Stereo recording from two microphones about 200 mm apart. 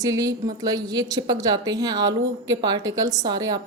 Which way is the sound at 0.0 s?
15° right (ahead or behind).